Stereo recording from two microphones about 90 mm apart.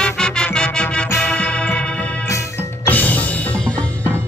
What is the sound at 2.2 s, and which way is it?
Music, 35° left (ahead or behind).